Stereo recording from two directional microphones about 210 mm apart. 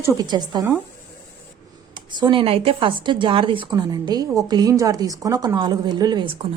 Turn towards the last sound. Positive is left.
turn(degrees=-20)  # may be behind; listen again after turning